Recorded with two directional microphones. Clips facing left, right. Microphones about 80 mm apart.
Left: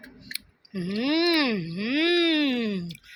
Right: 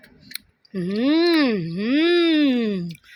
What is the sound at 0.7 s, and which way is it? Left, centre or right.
Speech, right.